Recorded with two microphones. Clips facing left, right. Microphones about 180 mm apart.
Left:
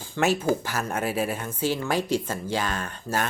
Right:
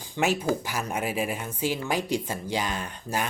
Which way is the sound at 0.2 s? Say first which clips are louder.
Left 2 dB; 15° right (ahead or behind).